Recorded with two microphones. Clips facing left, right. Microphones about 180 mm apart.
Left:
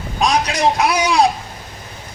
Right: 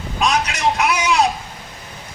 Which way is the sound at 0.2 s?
35° left (ahead or behind).